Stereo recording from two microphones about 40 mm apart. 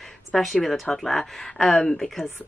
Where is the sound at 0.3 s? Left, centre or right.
Centre.